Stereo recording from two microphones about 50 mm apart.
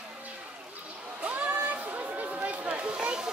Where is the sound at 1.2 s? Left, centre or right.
Right.